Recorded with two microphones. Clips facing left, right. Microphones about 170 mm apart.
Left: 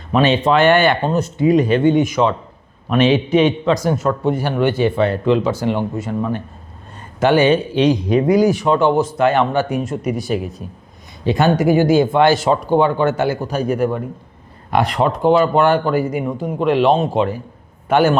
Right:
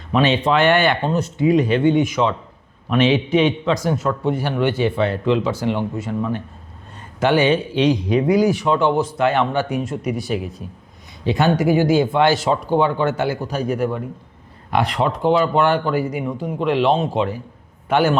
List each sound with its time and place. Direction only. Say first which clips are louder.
0.1 s a man's voice: left 3 dB; 45° left (ahead or behind)